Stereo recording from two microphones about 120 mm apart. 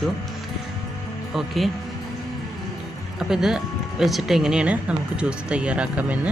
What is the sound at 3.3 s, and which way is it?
Speech, 5° right (ahead or behind).